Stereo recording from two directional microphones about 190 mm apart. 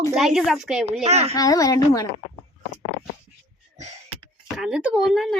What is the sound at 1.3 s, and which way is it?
Speech, 20° left (ahead or behind).